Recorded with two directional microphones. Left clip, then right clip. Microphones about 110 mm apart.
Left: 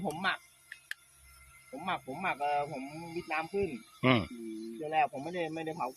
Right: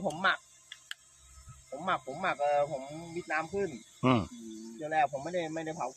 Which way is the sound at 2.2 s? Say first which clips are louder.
Right 3 dB; 15° right (ahead or behind).